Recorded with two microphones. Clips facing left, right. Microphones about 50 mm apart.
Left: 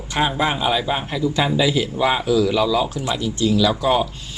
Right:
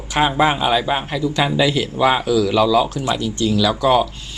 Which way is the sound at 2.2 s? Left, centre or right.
Centre.